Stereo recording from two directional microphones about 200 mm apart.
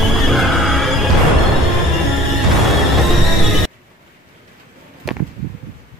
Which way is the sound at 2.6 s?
Centre (ahead or behind).